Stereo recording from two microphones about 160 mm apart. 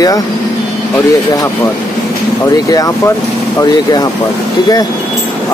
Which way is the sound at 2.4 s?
20° left (ahead or behind).